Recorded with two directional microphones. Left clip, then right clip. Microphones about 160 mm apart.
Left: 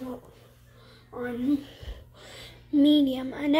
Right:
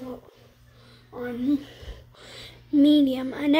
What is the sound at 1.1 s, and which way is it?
Speech, 20° right (ahead or behind).